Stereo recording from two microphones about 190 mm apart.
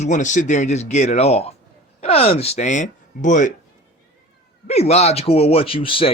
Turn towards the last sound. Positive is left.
turn(degrees=30)  # may be behind; listen again after turning